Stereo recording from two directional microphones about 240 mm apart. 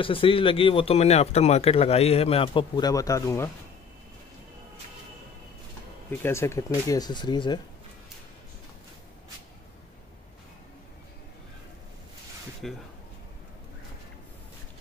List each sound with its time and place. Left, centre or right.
0.0 s speech: left
6.0 s speech: centre
12.6 s speech: centre